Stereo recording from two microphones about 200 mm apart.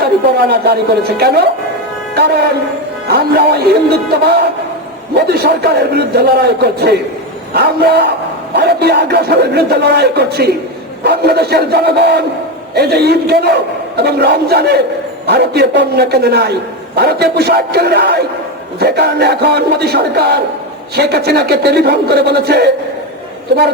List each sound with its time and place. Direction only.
0.0 s a man's voice: 55° right (ahead or behind)
3.1 s a man's voice: 55° right (ahead or behind)